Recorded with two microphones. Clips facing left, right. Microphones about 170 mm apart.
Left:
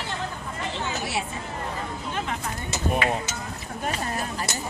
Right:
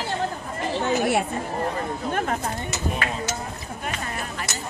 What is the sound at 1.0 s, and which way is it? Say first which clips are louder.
Speech: right 8 dB; 55° right (ahead or behind).